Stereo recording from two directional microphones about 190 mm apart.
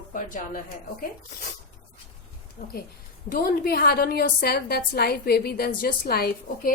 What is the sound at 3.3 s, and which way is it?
A woman's voice, 50° left (ahead or behind).